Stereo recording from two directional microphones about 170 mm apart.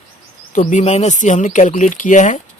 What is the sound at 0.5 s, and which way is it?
Speech, 45° left (ahead or behind).